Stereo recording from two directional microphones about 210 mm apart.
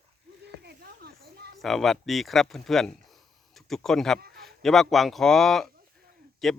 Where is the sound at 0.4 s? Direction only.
50° right (ahead or behind).